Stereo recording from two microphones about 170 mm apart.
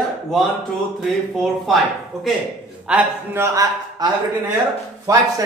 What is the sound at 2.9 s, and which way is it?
A man's voice, 10° right (ahead or behind).